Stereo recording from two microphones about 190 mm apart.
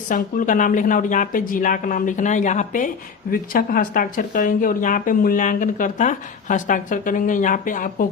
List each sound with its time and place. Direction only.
0.1 s speech: 45° left (ahead or behind)